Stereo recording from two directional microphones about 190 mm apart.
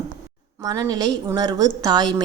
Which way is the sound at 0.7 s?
20° right (ahead or behind).